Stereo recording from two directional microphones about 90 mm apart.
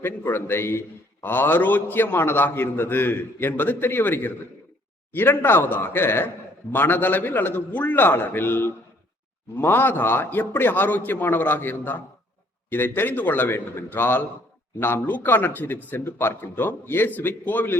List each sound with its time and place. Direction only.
0.0 s a man's voice: 20° left (ahead or behind)